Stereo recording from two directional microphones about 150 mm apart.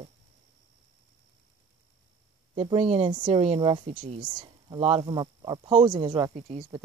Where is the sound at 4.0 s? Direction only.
55° right (ahead or behind).